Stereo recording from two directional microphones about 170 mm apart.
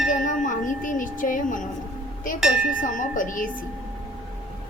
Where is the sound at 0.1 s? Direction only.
50° left (ahead or behind).